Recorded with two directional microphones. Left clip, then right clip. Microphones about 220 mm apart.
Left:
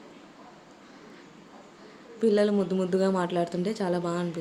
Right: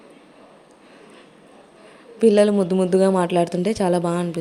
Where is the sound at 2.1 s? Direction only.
30° right (ahead or behind).